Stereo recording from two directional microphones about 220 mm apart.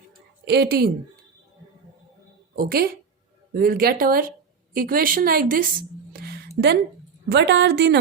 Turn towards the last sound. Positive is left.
turn(degrees=-50)  # may be behind; listen again after turning